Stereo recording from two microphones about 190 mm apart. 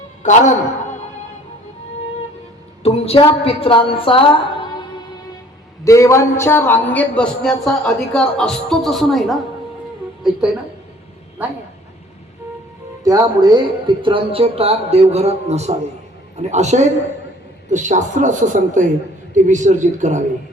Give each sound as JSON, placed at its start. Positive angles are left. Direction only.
{"t": 0.2, "sound": "a woman's voice", "side_deg": 40}
{"t": 2.8, "sound": "a woman's voice", "side_deg": 30}
{"t": 5.8, "sound": "speech", "side_deg": 15}
{"t": 13.1, "sound": "speech", "side_deg": -20}